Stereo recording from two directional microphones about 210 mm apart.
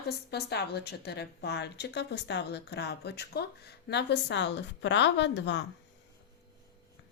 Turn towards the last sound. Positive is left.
turn(degrees=55)  # may be behind; listen again after turning